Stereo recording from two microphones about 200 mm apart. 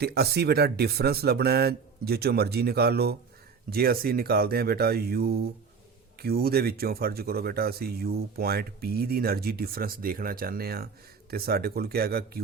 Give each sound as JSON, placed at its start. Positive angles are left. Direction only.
{"t": 0.0, "sound": "speech", "side_deg": -55}